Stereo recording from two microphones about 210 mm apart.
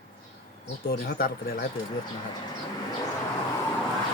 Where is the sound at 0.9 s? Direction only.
45° left (ahead or behind).